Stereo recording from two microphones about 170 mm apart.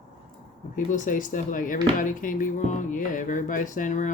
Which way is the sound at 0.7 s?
50° left (ahead or behind).